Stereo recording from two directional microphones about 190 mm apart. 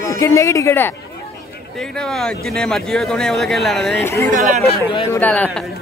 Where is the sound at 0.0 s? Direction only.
15° left (ahead or behind).